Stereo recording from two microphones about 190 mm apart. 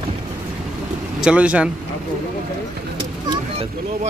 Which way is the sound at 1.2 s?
5° right (ahead or behind).